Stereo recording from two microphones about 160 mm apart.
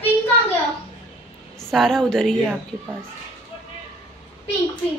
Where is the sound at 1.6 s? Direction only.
Centre (ahead or behind).